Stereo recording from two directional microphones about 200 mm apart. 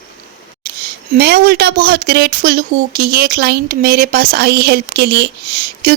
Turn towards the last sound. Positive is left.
turn(degrees=-45)  # may be behind; listen again after turning